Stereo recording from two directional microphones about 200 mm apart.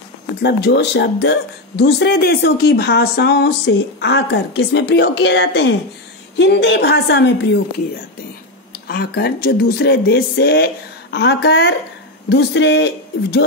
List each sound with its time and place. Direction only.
0.4 s a woman's voice: 55° left (ahead or behind)
8.8 s a woman's voice: 55° left (ahead or behind)